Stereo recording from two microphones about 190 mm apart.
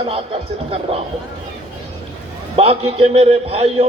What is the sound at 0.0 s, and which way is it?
Speech, 30° right (ahead or behind).